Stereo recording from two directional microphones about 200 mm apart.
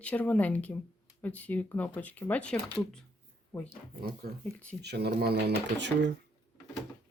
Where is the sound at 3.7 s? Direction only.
50° right (ahead or behind).